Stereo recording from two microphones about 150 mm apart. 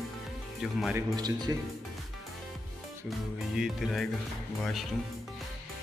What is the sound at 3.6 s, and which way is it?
Speech, centre (ahead or behind).